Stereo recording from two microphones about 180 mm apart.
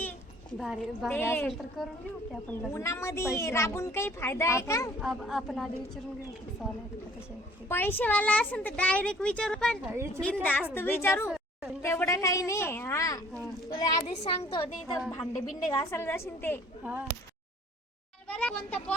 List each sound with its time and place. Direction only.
0.5 s speech: centre (ahead or behind)
1.2 s speech: 15° left (ahead or behind)
1.8 s speech: centre (ahead or behind)
2.7 s speech: 15° left (ahead or behind)
4.9 s speech: centre (ahead or behind)
7.7 s speech: 10° left (ahead or behind)
9.8 s a woman's voice: 15° right (ahead or behind)
10.4 s a woman's voice: 10° left (ahead or behind)
15.6 s speech: 5° left (ahead or behind)
16.8 s a woman's voice: 10° right (ahead or behind)
18.3 s speech: 10° left (ahead or behind)